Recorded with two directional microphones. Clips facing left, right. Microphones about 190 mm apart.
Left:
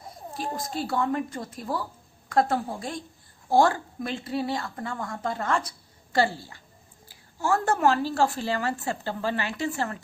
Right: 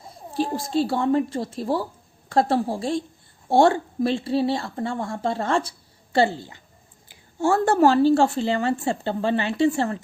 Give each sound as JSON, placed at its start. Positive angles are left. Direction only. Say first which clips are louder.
{"t": 0.3, "sound": "a woman's voice", "louder": "right 9 dB", "side_deg": -30}